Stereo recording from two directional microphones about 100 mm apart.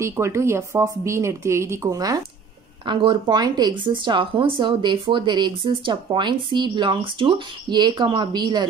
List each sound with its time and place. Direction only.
0.0 s speech: 30° right (ahead or behind)
2.8 s speech: 55° right (ahead or behind)